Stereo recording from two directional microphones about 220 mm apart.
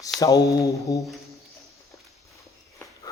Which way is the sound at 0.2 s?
15° left (ahead or behind).